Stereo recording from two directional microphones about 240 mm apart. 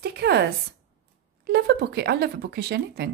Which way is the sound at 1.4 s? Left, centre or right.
Right.